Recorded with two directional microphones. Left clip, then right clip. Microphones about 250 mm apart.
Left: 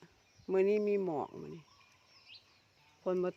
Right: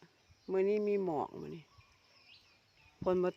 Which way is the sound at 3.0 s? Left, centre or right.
Centre.